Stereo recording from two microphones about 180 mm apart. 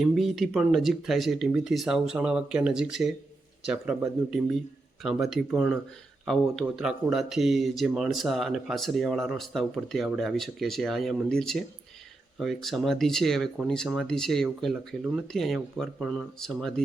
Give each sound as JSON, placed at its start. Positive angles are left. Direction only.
{"t": 0.0, "sound": "speech", "side_deg": 0}